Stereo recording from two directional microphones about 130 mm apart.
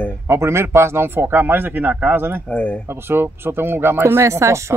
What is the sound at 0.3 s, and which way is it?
Speech, 20° right (ahead or behind).